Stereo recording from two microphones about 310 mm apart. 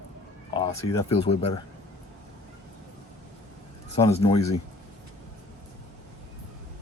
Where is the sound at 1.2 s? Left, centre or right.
Centre.